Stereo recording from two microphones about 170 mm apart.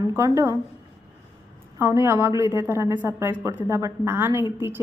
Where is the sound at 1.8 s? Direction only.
15° right (ahead or behind).